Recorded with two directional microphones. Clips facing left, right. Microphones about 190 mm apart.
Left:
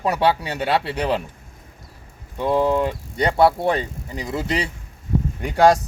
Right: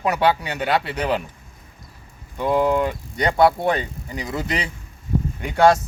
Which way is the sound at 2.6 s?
30° left (ahead or behind).